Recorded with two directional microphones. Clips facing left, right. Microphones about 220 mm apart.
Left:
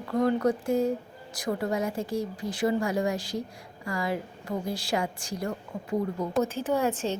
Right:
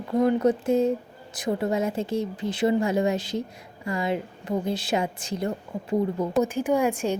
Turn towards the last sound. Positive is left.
turn(degrees=-15)  # may be behind; listen again after turning